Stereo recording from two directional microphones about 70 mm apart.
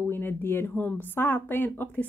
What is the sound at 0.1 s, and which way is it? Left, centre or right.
Speech, left.